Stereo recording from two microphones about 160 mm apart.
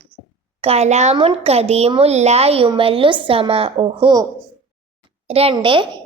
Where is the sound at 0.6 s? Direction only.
40° right (ahead or behind).